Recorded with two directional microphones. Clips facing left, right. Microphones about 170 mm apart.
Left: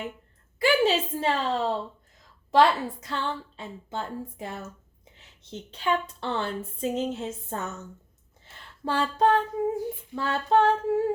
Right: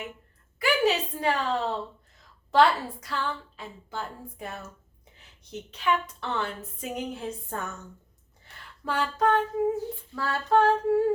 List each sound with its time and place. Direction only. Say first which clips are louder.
0.6 s speech: left 2 dB; 25° left (ahead or behind)
8.4 s a sound: left 2 dB; 25° left (ahead or behind)
9.8 s speech: left 2 dB; 20° left (ahead or behind)